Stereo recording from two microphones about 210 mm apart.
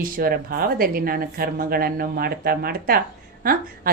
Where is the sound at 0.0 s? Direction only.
45° right (ahead or behind).